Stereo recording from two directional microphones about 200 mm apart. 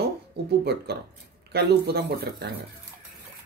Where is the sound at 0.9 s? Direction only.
50° right (ahead or behind).